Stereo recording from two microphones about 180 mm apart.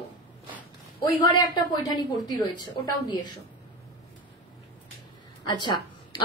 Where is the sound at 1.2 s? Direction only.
25° left (ahead or behind).